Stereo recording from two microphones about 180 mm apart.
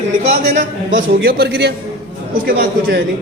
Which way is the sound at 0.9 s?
75° right (ahead or behind).